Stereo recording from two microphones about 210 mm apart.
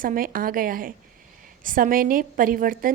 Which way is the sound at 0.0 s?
40° right (ahead or behind).